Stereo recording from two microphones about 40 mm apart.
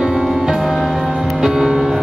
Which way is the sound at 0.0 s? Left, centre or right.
Centre.